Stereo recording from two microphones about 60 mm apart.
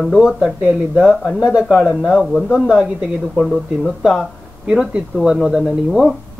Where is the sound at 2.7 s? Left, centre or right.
Right.